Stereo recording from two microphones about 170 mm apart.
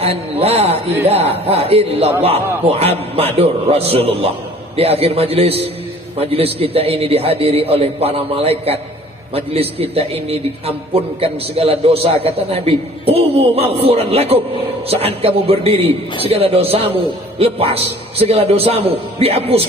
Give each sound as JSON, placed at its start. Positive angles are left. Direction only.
{"t": 0.0, "sound": "a man's voice", "side_deg": -35}